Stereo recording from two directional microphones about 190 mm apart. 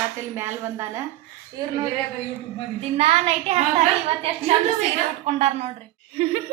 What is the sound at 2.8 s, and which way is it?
Speech, 35° right (ahead or behind).